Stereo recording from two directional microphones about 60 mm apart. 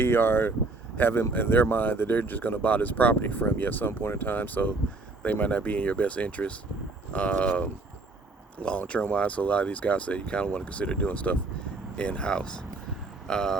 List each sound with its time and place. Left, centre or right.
0.0 s speech: left; by 13.6 s centre